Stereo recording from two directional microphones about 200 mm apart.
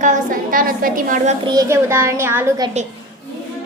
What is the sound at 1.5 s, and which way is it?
A child's voice, 15° right (ahead or behind).